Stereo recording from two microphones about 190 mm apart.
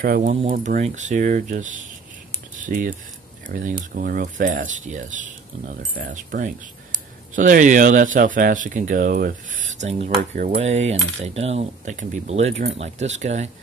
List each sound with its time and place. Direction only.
0.0 s speech: 45° right (ahead or behind)
0.5 s keys jangling: 35° right (ahead or behind)
2.5 s a sound: 45° right (ahead or behind)
3.4 s speech: 45° right (ahead or behind)
10.5 s keys jangling: 35° right (ahead or behind)